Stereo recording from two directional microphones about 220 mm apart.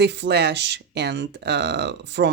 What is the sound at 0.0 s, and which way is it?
Speech, 50° right (ahead or behind).